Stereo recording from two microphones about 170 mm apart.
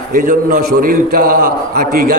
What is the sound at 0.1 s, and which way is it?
A man's voice, 50° right (ahead or behind).